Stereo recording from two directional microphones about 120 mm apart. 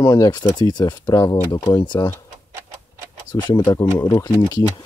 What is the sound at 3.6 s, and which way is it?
Speech, 20° left (ahead or behind).